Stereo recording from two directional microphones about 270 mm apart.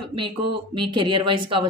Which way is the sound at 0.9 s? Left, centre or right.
Centre.